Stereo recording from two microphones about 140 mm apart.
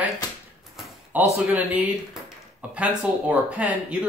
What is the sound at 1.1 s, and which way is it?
Speech, 10° right (ahead or behind).